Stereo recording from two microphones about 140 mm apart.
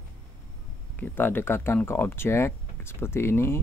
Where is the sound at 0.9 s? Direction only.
15° left (ahead or behind).